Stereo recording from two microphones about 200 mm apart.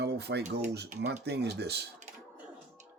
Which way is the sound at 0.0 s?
55° right (ahead or behind).